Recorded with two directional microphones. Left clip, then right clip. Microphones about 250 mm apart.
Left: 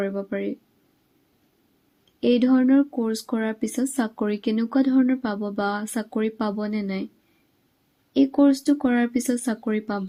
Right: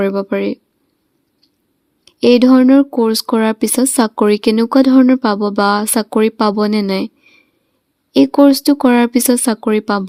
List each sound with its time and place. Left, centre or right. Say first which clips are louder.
0.0 s speech: right 11 dB; right
2.2 s speech: right 11 dB; right
8.1 s speech: right 10 dB; right